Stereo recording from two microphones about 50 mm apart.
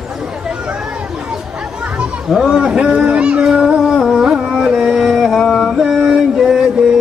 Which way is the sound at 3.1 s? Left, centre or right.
Right.